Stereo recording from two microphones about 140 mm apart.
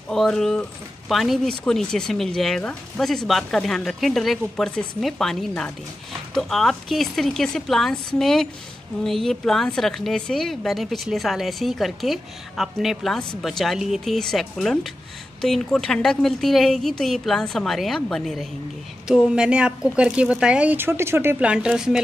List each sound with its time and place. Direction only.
0.1 s speech: 5° left (ahead or behind)